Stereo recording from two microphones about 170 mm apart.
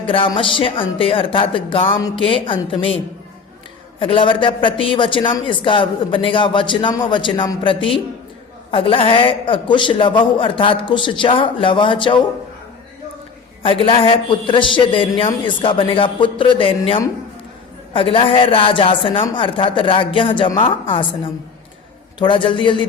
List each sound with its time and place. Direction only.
0.0 s a man's voice: 30° left (ahead or behind)
2.0 s a man's voice: 20° left (ahead or behind)
2.2 s a man's voice: 30° left (ahead or behind)
4.0 s a man's voice: 30° left (ahead or behind)
13.6 s a man's voice: 30° left (ahead or behind)
22.2 s a man's voice: 30° left (ahead or behind)